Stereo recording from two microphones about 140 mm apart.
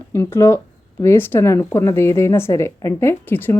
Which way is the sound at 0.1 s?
20° left (ahead or behind).